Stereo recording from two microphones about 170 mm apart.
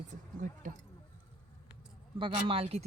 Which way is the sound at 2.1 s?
30° right (ahead or behind).